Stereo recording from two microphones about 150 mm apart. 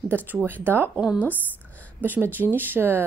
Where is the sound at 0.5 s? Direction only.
15° right (ahead or behind).